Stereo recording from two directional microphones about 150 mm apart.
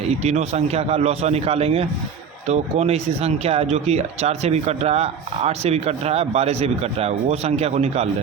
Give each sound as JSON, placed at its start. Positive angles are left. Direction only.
{"t": 0.1, "sound": "speech", "side_deg": -50}